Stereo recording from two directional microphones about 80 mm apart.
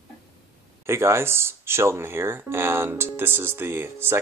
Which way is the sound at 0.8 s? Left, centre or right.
Right.